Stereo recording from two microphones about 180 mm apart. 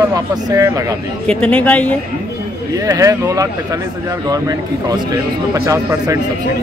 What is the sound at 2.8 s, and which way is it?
Speech, 20° right (ahead or behind).